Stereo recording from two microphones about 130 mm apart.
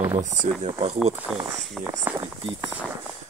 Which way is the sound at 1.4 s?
5° right (ahead or behind).